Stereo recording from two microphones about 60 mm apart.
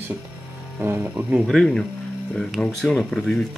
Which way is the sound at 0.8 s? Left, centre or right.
Right.